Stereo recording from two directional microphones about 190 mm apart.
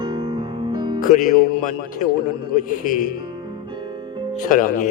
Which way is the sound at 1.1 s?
45° left (ahead or behind).